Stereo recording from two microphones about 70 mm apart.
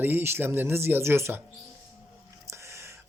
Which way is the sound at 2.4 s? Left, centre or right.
Right.